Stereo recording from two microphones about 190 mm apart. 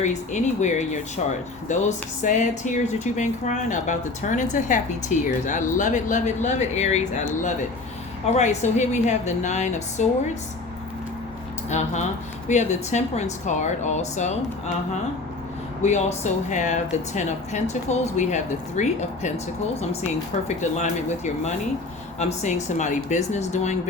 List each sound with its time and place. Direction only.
0.0 s a woman's voice: 40° left (ahead or behind)
8.3 s a woman's voice: 40° left (ahead or behind)
11.7 s a woman's voice: 35° left (ahead or behind)
15.8 s a woman's voice: 40° left (ahead or behind)